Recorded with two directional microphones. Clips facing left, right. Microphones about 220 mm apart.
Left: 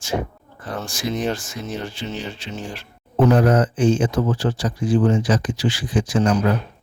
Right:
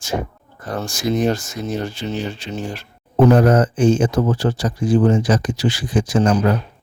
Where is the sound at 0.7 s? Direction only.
40° right (ahead or behind).